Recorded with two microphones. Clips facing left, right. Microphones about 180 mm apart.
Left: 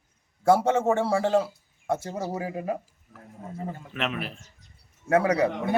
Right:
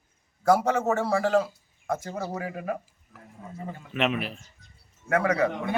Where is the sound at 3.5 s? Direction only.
40° left (ahead or behind).